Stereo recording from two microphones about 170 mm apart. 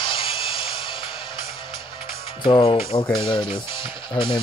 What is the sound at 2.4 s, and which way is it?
Speech, 30° left (ahead or behind).